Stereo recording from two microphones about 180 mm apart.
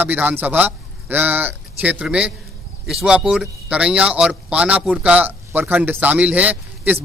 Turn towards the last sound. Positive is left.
turn(degrees=-10)  # may be behind; listen again after turning